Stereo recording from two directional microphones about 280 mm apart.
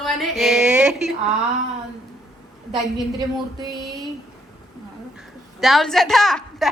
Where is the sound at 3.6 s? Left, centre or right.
Centre.